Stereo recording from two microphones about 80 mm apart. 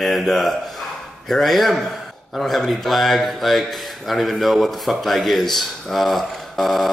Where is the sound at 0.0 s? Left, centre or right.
Centre.